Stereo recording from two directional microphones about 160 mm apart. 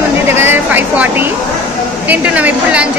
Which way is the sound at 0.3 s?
15° right (ahead or behind).